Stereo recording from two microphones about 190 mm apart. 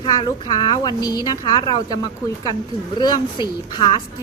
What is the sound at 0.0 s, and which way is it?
A woman's voice, 25° left (ahead or behind).